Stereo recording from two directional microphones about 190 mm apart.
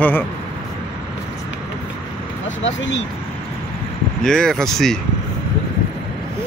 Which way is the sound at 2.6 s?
75° left (ahead or behind).